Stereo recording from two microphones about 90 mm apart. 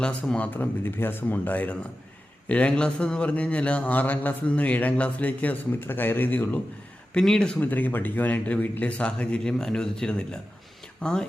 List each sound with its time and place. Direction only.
0.0 s a man's voice: 10° left (ahead or behind)
7.1 s a man's voice: 10° left (ahead or behind)
7.6 s a man's voice: 20° left (ahead or behind)